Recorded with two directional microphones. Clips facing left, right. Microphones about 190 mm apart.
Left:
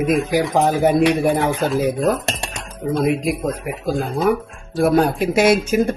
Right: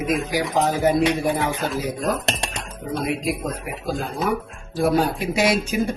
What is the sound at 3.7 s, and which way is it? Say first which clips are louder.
Speech: left 5 dB; 55° left (ahead or behind).